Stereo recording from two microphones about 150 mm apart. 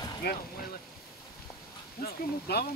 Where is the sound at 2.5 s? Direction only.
90° left.